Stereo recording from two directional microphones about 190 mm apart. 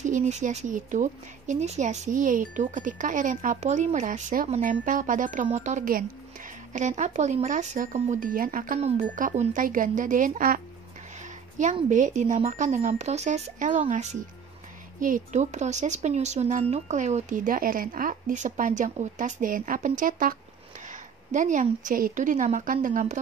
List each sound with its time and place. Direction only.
0.0 s speech: 40° right (ahead or behind)